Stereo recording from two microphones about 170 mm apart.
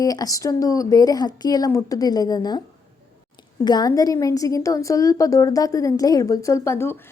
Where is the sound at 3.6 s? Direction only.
25° left (ahead or behind).